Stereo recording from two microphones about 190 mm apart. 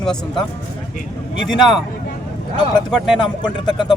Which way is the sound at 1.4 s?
Centre (ahead or behind).